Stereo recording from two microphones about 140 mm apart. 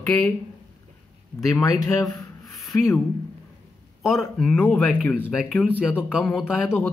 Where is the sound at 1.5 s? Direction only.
25° left (ahead or behind).